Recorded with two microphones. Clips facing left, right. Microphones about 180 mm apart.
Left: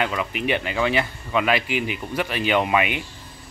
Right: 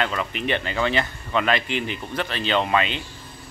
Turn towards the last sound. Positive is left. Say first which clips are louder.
# left 1 dB
turn(degrees=15)  # may be behind; listen again after turning